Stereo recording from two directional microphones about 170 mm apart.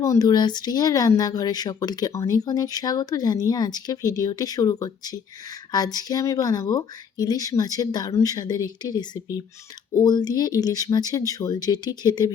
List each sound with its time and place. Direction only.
0.0 s speech: 20° left (ahead or behind)